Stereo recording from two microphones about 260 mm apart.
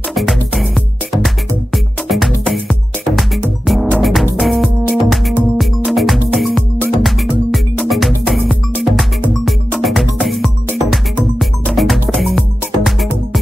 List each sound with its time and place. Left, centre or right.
0.1 s music: centre